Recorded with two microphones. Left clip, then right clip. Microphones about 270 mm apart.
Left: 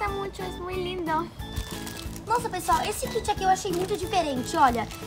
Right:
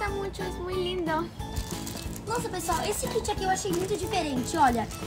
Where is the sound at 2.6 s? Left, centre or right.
Left.